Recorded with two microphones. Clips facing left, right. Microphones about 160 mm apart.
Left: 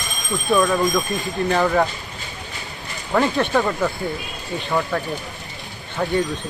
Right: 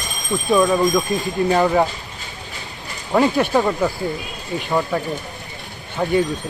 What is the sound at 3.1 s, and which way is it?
Speech, 15° right (ahead or behind).